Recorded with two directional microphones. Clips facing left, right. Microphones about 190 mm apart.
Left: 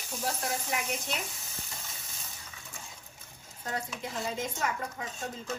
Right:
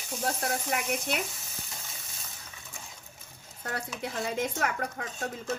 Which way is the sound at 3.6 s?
65° right (ahead or behind).